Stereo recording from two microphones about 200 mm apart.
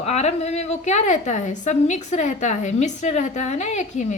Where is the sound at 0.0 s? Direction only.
30° left (ahead or behind).